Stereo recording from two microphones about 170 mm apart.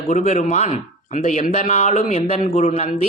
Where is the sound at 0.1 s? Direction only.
40° left (ahead or behind).